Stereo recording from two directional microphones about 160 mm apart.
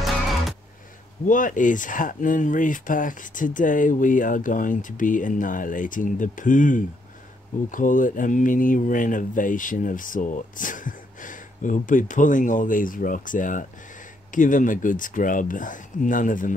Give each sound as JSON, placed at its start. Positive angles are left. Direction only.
{"t": 1.2, "sound": "speech", "side_deg": 55}